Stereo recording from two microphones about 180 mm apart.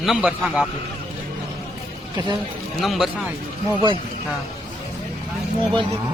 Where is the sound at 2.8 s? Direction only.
Centre (ahead or behind).